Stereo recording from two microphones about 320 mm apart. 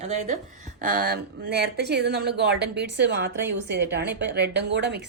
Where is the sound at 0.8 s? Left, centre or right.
Right.